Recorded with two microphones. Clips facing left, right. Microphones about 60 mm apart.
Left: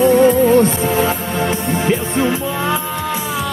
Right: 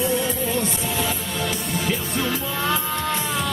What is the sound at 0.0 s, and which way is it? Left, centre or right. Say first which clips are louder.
Music: left 13 dB; left.